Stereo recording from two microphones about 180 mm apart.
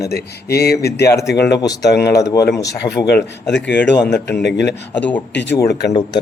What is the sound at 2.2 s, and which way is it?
Speech, 20° left (ahead or behind).